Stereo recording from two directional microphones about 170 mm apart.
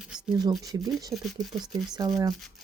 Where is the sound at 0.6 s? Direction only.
20° right (ahead or behind).